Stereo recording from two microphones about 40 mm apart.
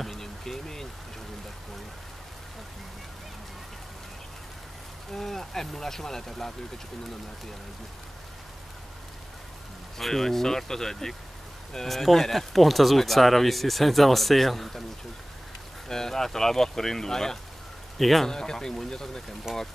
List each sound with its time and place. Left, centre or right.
0.0 s a sound: centre
5.1 s speech: centre
9.9 s speech: centre
15.9 s speech: centre
17.9 s speech: centre
18.3 s speech: centre